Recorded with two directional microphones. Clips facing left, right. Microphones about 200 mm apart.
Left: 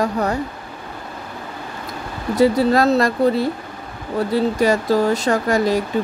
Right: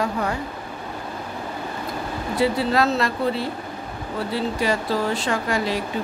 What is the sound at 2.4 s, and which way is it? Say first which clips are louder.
Speech: left 6 dB; 40° left (ahead or behind).